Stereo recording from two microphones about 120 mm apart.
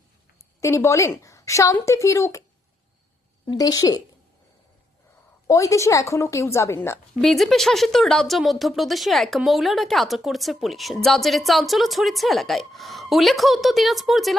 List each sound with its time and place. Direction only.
0.6 s a woman's voice: 25° left (ahead or behind)
3.5 s a woman's voice: 30° left (ahead or behind)
5.5 s a woman's voice: 25° left (ahead or behind)
7.2 s speech: centre (ahead or behind)